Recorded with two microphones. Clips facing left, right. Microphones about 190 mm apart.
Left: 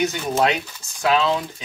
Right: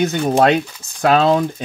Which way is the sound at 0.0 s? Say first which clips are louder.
Right 6 dB; 55° right (ahead or behind).